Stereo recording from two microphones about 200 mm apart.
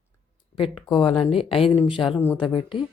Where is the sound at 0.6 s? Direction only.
25° left (ahead or behind).